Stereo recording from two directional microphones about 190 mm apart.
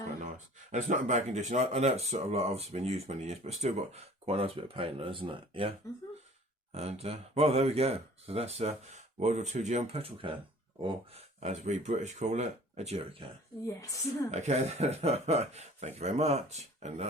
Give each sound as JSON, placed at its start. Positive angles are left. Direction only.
{"t": 0.7, "sound": "speech", "side_deg": -40}
{"t": 6.7, "sound": "speech", "side_deg": -35}
{"t": 13.7, "sound": "a woman's voice", "side_deg": 15}
{"t": 14.3, "sound": "speech", "side_deg": -35}